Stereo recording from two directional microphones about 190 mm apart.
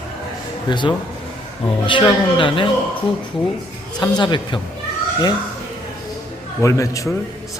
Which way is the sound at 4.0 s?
25° left (ahead or behind).